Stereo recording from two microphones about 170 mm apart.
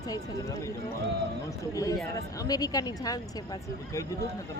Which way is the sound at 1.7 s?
20° left (ahead or behind).